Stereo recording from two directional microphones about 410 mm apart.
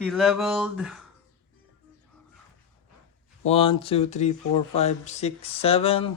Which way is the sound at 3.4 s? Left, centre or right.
Centre.